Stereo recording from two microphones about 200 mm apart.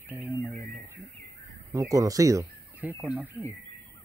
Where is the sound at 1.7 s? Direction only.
15° right (ahead or behind).